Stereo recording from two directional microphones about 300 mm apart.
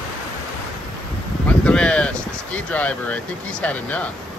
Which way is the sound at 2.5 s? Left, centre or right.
Centre.